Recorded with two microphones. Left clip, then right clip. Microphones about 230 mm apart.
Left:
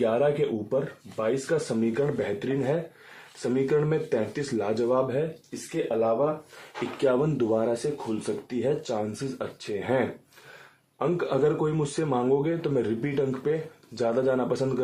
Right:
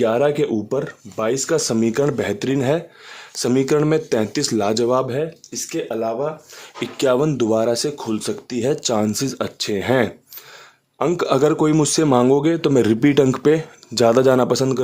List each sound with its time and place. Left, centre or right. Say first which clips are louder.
0.0 s a man's voice: right 6 dB; right
7.0 s a man's voice: right 7 dB; right